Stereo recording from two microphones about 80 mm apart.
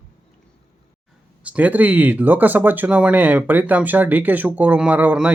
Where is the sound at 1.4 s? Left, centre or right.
Centre.